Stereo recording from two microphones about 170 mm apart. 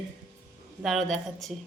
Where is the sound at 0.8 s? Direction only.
Centre (ahead or behind).